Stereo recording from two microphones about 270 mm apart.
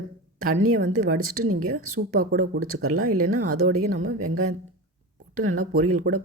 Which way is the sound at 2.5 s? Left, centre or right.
Right.